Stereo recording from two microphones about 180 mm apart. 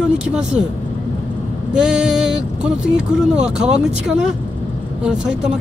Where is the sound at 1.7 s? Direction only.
5° right (ahead or behind).